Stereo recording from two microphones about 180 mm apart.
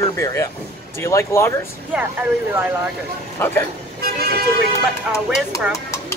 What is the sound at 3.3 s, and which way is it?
Speech, 10° left (ahead or behind).